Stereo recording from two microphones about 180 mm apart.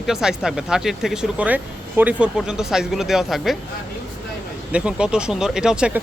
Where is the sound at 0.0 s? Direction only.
5° right (ahead or behind).